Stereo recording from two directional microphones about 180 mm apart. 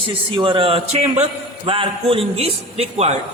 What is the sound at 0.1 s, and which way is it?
A man's voice, 30° right (ahead or behind).